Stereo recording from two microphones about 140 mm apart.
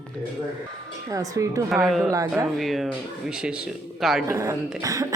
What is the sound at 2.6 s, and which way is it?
A man's voice, centre (ahead or behind).